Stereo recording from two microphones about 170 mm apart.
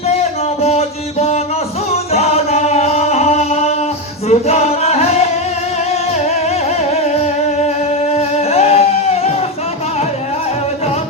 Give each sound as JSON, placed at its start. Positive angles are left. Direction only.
{"t": 0.1, "sound": "music", "side_deg": 40}
{"t": 8.1, "sound": "music", "side_deg": 40}